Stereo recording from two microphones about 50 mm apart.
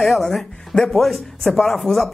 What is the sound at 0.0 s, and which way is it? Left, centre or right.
Speech, centre.